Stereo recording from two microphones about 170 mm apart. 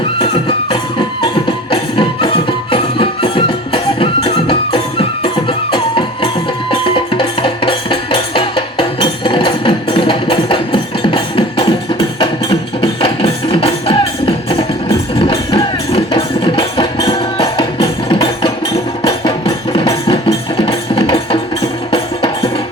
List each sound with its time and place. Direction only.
0.2 s music: 30° left (ahead or behind)